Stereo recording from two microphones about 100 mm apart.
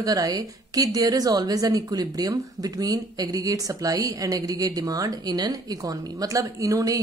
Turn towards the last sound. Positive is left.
turn(degrees=-35)  # may be behind; listen again after turning